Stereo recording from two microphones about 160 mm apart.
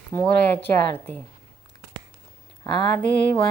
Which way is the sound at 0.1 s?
15° left (ahead or behind).